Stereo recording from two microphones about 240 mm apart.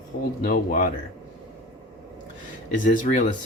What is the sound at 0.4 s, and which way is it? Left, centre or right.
Speech, left.